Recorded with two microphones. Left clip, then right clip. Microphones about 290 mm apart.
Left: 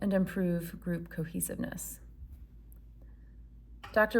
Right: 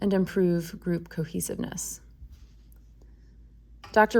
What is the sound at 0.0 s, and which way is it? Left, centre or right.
Speech, right.